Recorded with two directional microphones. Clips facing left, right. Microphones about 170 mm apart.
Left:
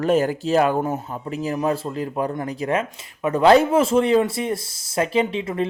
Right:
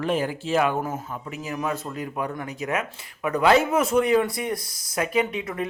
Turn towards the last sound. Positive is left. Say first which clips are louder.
# left 4 dB
turn(degrees=25)  # may be behind; listen again after turning